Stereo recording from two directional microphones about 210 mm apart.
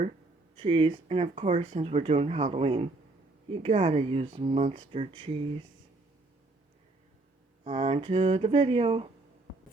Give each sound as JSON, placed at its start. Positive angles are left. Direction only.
{"t": 0.5, "sound": "speech", "side_deg": -25}
{"t": 7.6, "sound": "speech", "side_deg": -30}